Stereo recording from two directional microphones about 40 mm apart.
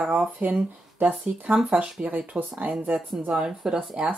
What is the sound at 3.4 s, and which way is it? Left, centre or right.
Speech, centre.